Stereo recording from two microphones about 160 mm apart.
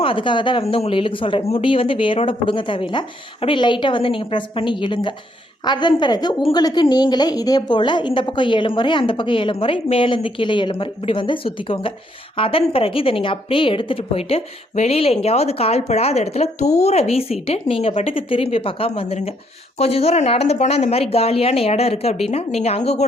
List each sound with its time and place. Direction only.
0.0 s a woman's voice: 35° left (ahead or behind)